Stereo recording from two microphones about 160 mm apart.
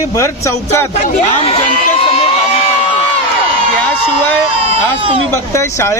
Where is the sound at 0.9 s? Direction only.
40° left (ahead or behind).